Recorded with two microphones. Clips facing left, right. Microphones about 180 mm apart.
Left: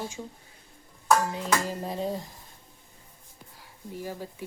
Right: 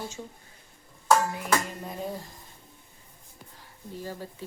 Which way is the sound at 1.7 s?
30° left (ahead or behind).